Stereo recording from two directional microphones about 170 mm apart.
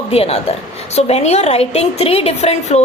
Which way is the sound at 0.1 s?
35° left (ahead or behind).